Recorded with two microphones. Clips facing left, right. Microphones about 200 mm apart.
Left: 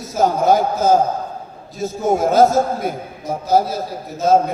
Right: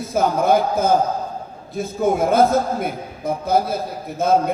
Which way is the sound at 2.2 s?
55° right (ahead or behind).